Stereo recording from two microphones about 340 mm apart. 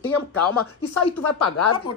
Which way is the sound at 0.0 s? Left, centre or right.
Centre.